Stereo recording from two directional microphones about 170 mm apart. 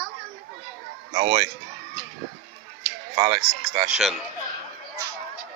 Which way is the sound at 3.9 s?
Centre (ahead or behind).